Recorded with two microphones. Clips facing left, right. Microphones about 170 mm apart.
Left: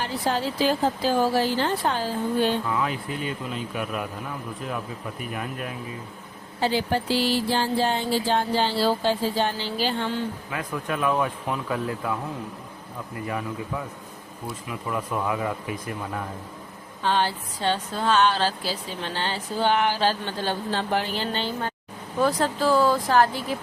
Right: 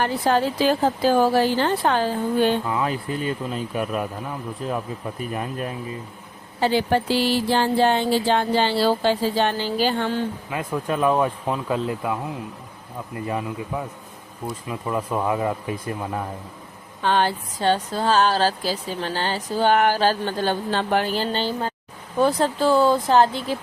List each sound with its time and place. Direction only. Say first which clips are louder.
0.0 s music: right 5 dB; 55° right (ahead or behind)
2.6 s speech: right 2 dB; 25° right (ahead or behind)
3.1 s speech: right 4 dB; 40° right (ahead or behind)
6.6 s music: right 4 dB; 60° right (ahead or behind)
9.6 s speech: right 4 dB; 50° right (ahead or behind)
10.5 s speech: right 6 dB; 25° right (ahead or behind)
13.2 s speech: right 3 dB; 25° right (ahead or behind)
17.0 s speech: right 3 dB; 55° right (ahead or behind)
21.1 s speech: right 4 dB; 35° right (ahead or behind)